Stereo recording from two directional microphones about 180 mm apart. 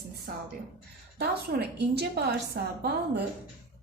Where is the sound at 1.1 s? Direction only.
65° right (ahead or behind).